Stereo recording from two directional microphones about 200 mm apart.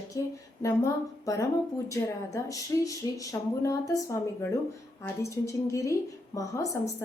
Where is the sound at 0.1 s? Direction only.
20° left (ahead or behind).